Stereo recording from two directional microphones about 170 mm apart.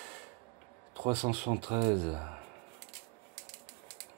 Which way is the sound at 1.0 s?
40° right (ahead or behind).